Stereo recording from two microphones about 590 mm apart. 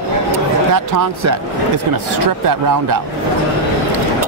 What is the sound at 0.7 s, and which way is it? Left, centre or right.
Speech, right.